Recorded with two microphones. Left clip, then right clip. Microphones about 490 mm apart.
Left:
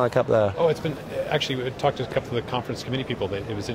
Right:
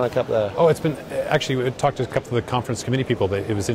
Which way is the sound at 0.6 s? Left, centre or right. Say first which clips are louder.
Right 5 dB; right.